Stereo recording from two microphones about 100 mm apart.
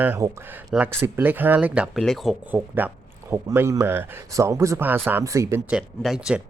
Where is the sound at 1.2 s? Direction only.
20° right (ahead or behind).